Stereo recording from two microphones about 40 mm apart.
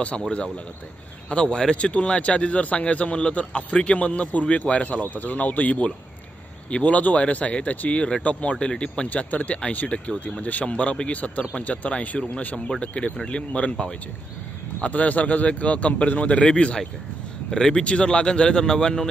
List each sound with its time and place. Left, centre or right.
1.3 s speech: left
1.8 s a man's voice: left
9.1 s a man's voice: left
12.5 s speech: centre
12.8 s a man's voice: left
14.8 s a man's voice: left
17.5 s speech: centre